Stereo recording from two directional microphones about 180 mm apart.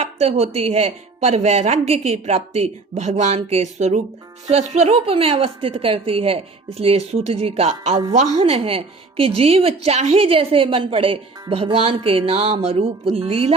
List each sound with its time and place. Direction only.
0.0 s speech: 35° right (ahead or behind)